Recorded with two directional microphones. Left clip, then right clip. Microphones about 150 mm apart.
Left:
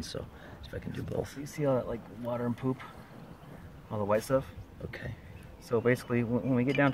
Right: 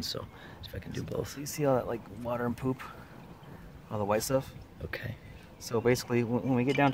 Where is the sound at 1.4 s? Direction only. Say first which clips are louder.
Right 2 dB; 20° right (ahead or behind).